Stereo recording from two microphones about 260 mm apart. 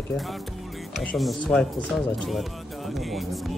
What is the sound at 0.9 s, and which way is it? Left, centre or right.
Speech, centre.